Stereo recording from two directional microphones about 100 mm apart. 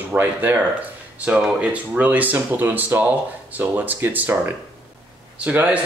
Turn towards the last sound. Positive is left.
turn(degrees=-15)  # may be behind; listen again after turning